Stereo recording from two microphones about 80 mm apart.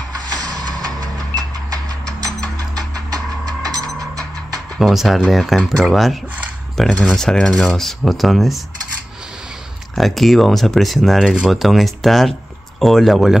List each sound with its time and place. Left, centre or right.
0.7 s music: right
3.7 s music: right
4.7 s speech: centre
7.2 s a sound: centre
7.7 s speech: centre
9.9 s speech: centre